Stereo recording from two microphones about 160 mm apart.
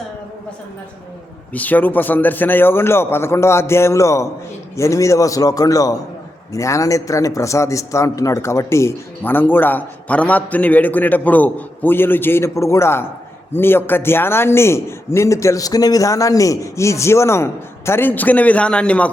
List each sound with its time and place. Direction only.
1.5 s a man's voice: 10° left (ahead or behind)